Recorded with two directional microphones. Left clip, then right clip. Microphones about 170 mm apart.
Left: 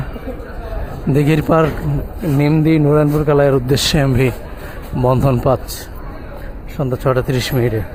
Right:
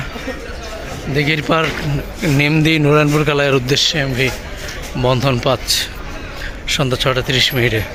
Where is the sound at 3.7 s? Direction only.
40° left (ahead or behind).